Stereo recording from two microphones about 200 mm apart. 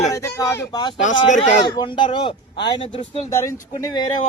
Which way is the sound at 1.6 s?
20° left (ahead or behind).